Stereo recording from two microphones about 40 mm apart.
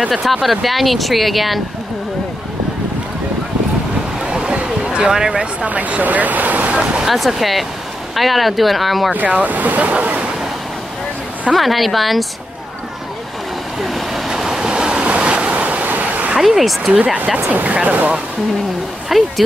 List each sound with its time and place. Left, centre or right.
0.1 s speech: centre
4.3 s a sound: right
5.7 s speech: right
7.2 s speech: centre
9.1 s speech: right
11.5 s speech: centre
13.7 s waves: centre; by 15.8 s right
15.8 s a sound: right
16.3 s speech: centre
17.5 s speech: right
19.0 s speech: centre